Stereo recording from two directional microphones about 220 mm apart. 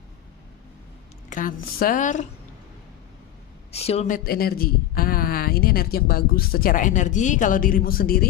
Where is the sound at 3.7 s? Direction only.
30° left (ahead or behind).